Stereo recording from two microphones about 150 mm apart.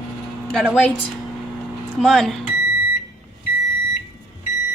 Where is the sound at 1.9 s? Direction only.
Centre (ahead or behind).